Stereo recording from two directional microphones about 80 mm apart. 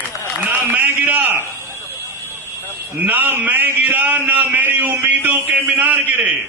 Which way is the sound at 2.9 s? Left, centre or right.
Right.